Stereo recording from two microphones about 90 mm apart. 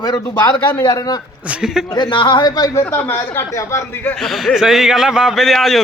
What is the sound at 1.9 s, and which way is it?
Speech, 60° left (ahead or behind).